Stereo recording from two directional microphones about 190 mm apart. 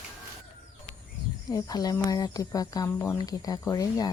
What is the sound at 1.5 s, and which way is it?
Speech, 20° left (ahead or behind).